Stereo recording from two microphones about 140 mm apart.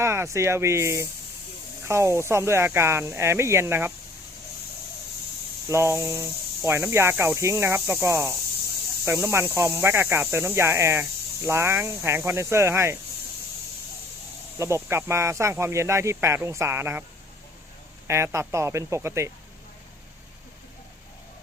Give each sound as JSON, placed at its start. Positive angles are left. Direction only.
{"t": 0.0, "sound": "speech", "side_deg": -20}
{"t": 5.6, "sound": "speech", "side_deg": -20}
{"t": 14.6, "sound": "speech", "side_deg": -20}
{"t": 18.1, "sound": "speech", "side_deg": -20}